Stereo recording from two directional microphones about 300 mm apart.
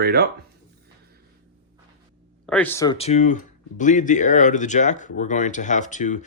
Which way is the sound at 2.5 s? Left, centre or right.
Centre.